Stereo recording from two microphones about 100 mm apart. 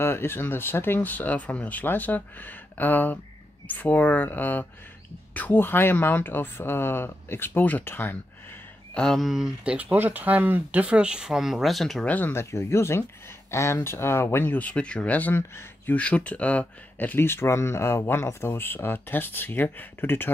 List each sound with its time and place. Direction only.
0.0 s speech: 25° left (ahead or behind)
8.9 s speech: 5° left (ahead or behind)
9.8 s speech: 15° right (ahead or behind); by 12.1 s centre (ahead or behind)
12.1 s speech: 20° left (ahead or behind)